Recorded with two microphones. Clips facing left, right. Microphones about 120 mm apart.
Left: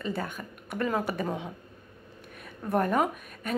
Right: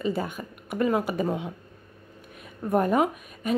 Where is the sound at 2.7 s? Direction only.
5° right (ahead or behind).